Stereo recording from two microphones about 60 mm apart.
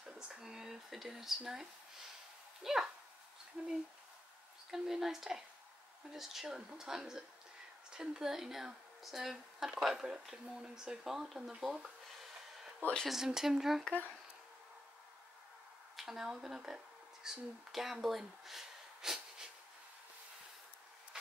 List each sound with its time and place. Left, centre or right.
0.0 s speech: centre
4.6 s speech: centre
13.0 s speech: centre
16.0 s speech: centre
18.0 s a sound: centre